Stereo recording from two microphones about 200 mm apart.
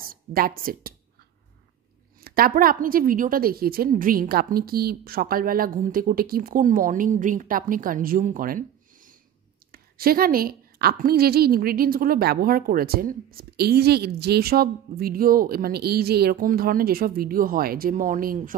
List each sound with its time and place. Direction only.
0.0 s speech: 45° right (ahead or behind)
2.2 s a woman's voice: 45° right (ahead or behind)